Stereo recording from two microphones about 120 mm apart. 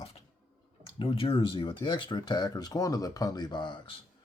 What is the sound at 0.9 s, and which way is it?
Speech, 50° left (ahead or behind).